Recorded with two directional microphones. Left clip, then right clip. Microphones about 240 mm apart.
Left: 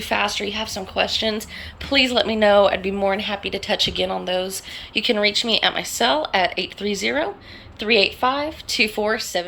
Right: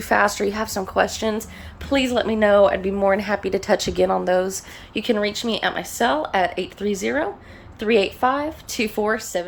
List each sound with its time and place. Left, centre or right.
0.1 s a woman's voice: right
3.2 s a woman's voice: right